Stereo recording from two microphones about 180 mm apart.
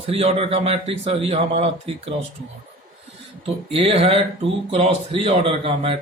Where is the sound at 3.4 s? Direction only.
30° right (ahead or behind).